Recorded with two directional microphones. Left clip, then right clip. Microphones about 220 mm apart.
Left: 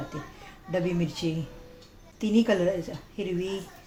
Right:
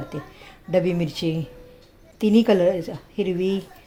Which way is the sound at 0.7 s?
45° right (ahead or behind).